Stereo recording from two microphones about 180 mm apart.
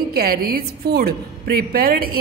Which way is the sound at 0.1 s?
55° right (ahead or behind).